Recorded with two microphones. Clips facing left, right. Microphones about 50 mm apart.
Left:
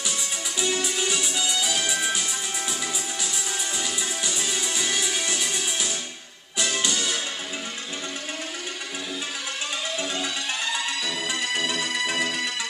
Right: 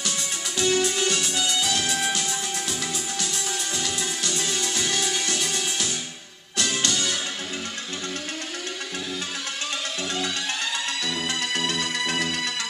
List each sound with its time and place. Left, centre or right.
0.6 s music: centre
3.7 s music: centre
11.1 s music: centre